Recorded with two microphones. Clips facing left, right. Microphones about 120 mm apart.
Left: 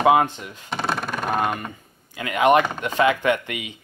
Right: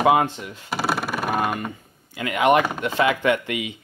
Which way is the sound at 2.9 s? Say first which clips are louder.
Left 1 dB; 20° left (ahead or behind).